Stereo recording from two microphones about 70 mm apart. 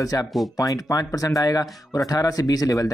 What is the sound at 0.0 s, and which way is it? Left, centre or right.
Speech, left.